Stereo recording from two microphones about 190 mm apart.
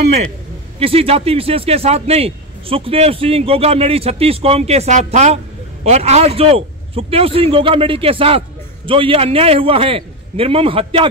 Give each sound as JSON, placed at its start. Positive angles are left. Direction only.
{"t": 0.7, "sound": "a man's voice", "side_deg": -30}